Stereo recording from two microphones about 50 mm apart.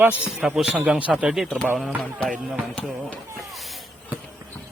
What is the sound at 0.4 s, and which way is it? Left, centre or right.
Speech, centre.